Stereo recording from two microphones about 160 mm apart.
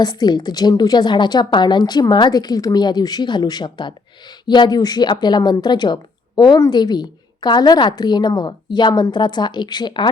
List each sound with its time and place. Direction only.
0.0 s a woman's voice: 25° left (ahead or behind)